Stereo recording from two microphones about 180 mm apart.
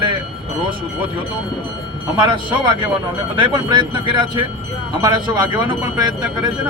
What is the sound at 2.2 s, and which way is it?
Speech, 25° right (ahead or behind).